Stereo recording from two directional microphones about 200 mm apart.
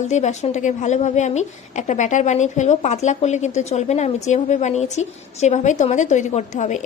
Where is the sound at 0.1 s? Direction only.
35° left (ahead or behind).